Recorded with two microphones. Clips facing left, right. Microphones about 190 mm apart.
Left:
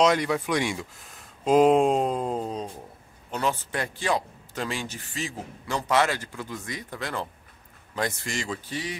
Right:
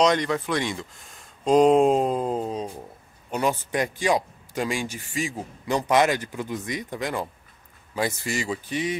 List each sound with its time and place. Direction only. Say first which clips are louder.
0.0 s speech: right 1 dB; 5° left (ahead or behind)
3.3 s a man's voice: right 3 dB; 15° right (ahead or behind)